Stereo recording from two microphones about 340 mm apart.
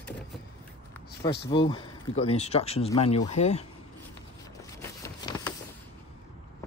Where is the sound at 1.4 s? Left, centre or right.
Centre.